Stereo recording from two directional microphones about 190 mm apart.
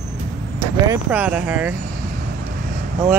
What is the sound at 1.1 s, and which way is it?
Speech, 10° right (ahead or behind).